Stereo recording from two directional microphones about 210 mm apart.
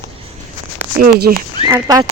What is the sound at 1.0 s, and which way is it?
Speech, 45° right (ahead or behind).